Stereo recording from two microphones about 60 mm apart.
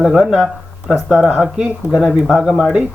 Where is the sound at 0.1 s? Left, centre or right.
Centre.